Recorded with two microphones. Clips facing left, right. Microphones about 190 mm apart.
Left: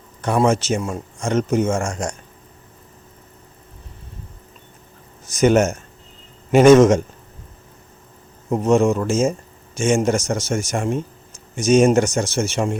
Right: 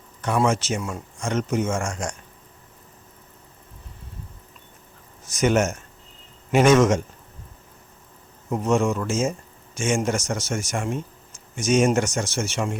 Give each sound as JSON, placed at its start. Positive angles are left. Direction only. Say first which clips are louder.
{"t": 0.2, "sound": "speech", "louder": "left 4 dB", "side_deg": 35}
{"t": 5.4, "sound": "speech", "louder": "left 5 dB", "side_deg": 35}
{"t": 8.4, "sound": "speech", "louder": "left 5 dB", "side_deg": 35}